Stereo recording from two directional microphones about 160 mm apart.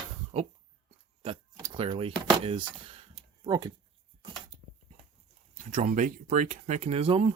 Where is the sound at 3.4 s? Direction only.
25° right (ahead or behind).